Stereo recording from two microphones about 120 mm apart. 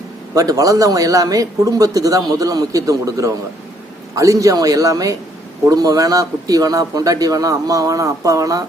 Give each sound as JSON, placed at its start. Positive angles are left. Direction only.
{"t": 0.3, "sound": "a man's voice", "side_deg": -30}